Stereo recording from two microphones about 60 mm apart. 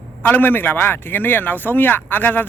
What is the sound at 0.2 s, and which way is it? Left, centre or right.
Speech, left.